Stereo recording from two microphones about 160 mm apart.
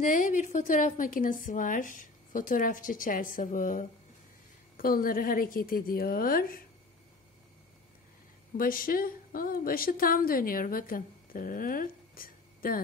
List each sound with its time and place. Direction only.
0.0 s a woman's voice: 55° left (ahead or behind)
8.5 s a woman's voice: 60° left (ahead or behind)